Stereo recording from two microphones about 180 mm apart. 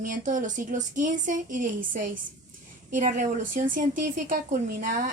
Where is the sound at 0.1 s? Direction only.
45° right (ahead or behind).